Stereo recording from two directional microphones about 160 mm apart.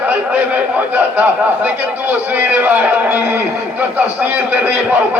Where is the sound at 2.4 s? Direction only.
10° right (ahead or behind).